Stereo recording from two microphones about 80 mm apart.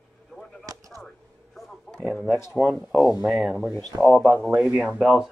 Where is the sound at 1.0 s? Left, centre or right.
Centre.